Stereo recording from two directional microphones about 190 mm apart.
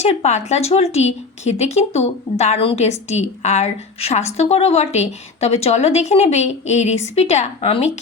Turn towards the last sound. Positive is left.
turn(degrees=30)  # may be behind; listen again after turning